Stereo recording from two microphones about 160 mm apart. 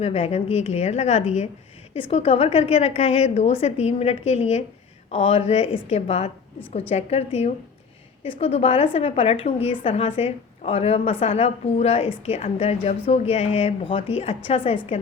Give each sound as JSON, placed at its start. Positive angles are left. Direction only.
{"t": 0.0, "sound": "a woman's voice", "side_deg": 40}